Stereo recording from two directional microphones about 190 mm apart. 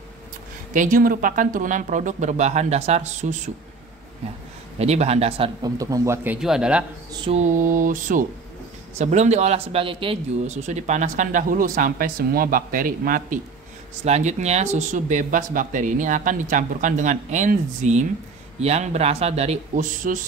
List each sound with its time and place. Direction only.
0.7 s a man's voice: 45° right (ahead or behind)
4.7 s a man's voice: 35° right (ahead or behind)
5.6 s speech: 20° right (ahead or behind)
7.1 s a sound: 25° right (ahead or behind)
7.3 s a man's voice: 40° right (ahead or behind)
14.0 s a man's voice: 35° right (ahead or behind)